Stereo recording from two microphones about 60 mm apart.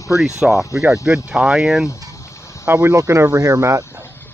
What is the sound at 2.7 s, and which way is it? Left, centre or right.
Speech, right.